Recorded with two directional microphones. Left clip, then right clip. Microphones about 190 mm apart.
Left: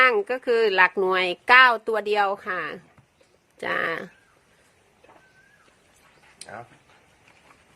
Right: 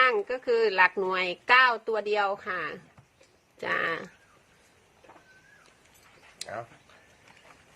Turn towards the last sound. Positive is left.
turn(degrees=-50)  # may be behind; listen again after turning